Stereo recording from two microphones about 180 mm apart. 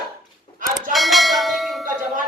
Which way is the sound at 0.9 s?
Centre (ahead or behind).